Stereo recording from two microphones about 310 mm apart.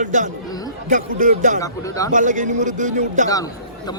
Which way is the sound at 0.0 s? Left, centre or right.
Right.